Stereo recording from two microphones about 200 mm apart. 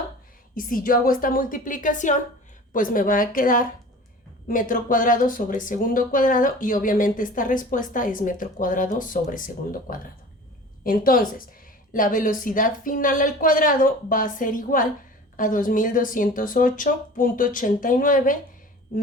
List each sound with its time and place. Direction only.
0.5 s a woman's voice: 45° left (ahead or behind)